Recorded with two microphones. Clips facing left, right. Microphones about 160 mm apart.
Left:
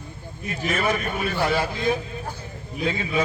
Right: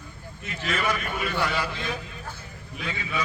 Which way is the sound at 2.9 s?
50° left (ahead or behind).